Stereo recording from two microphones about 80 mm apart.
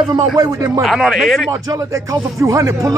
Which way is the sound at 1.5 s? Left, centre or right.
Right.